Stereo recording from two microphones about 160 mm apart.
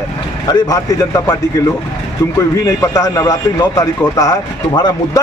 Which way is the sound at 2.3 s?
20° left (ahead or behind).